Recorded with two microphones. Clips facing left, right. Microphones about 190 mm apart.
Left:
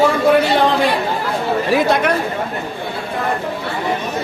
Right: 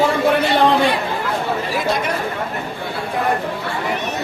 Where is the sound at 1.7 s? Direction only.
65° left (ahead or behind).